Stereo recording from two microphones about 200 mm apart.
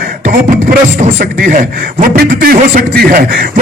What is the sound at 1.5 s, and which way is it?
Speech, 40° right (ahead or behind).